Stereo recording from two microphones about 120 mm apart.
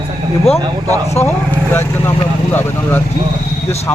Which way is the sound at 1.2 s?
15° left (ahead or behind).